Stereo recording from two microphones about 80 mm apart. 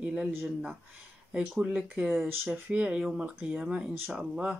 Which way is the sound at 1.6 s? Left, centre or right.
Centre.